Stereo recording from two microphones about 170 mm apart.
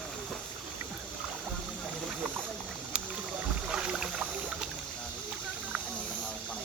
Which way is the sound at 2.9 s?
5° right (ahead or behind).